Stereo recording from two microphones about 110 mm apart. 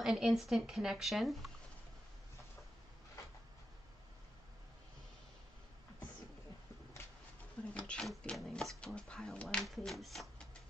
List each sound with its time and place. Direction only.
0.0 s speech: 5° right (ahead or behind)
7.7 s speech: 10° left (ahead or behind)